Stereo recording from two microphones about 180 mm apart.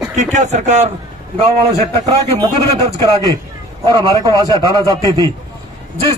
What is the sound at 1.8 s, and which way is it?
A man's voice, 20° right (ahead or behind).